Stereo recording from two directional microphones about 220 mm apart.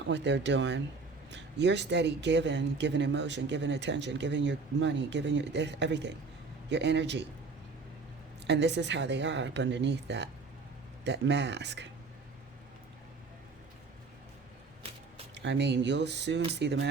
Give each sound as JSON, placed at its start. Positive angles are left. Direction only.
{"t": 0.1, "sound": "speech", "side_deg": -55}
{"t": 8.4, "sound": "speech", "side_deg": -50}
{"t": 15.4, "sound": "speech", "side_deg": -50}